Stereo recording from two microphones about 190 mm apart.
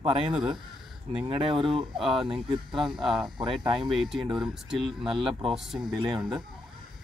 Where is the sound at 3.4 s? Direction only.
25° right (ahead or behind).